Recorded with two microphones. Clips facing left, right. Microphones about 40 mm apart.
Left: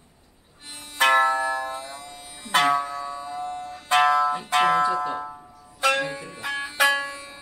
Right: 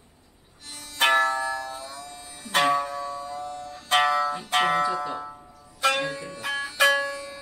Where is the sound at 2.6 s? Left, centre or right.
Centre.